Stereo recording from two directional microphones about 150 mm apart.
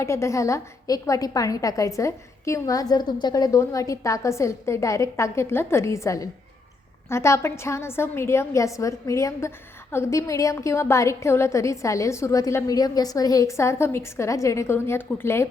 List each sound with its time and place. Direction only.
0.0 s a woman's voice: 20° left (ahead or behind)